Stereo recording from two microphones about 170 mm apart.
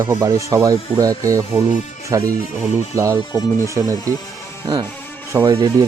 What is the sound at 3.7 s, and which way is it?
Speech, 20° right (ahead or behind).